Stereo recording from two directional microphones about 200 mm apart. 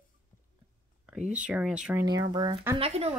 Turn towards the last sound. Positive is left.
turn(degrees=-30)  # may be behind; listen again after turning